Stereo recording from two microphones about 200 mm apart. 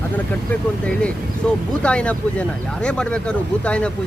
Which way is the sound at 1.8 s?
5° left (ahead or behind).